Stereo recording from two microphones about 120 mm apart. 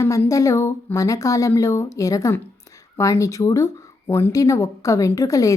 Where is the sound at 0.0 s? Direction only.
25° left (ahead or behind).